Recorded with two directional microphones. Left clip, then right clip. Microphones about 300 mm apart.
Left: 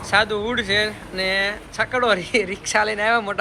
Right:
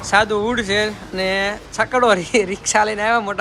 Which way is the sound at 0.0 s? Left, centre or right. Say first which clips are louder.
Right 3 dB; centre.